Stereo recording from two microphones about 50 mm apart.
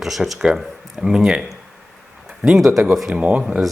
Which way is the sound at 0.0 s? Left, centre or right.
Centre.